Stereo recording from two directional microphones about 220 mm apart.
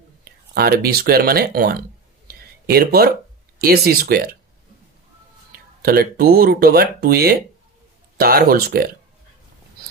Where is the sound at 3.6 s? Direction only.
45° right (ahead or behind).